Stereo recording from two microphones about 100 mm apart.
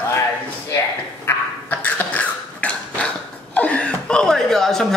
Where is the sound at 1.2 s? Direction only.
15° left (ahead or behind).